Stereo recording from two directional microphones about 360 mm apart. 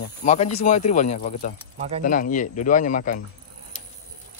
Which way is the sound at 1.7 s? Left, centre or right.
Centre.